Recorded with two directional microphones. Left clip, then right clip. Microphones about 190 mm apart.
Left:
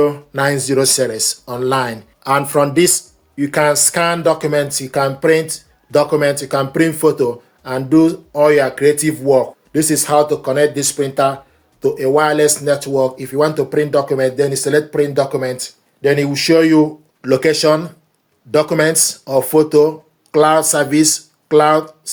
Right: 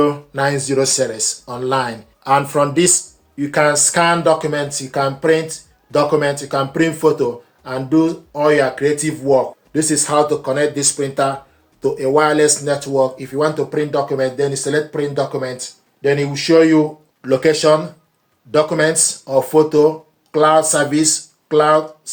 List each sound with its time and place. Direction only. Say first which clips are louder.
0.0 s speech: left 1 dB; 40° left (ahead or behind)